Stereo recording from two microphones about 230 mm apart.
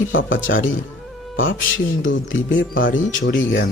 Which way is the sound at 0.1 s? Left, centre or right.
Left.